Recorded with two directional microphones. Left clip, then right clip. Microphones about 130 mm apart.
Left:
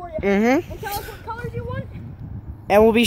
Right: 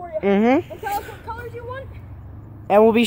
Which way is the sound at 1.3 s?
65° left (ahead or behind).